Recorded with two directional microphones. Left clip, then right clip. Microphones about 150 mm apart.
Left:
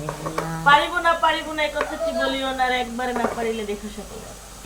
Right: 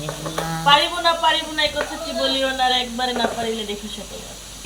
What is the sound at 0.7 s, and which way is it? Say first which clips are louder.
A woman's voice: even; 20° left (ahead or behind).